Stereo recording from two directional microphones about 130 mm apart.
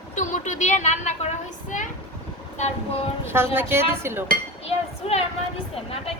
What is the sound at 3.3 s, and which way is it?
Speech, 20° right (ahead or behind).